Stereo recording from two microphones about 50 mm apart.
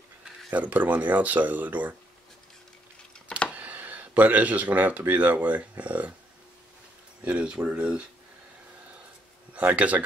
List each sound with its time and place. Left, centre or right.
0.5 s speech: right
3.3 s a sound: centre
3.5 s speech: right
7.2 s speech: centre
9.5 s speech: right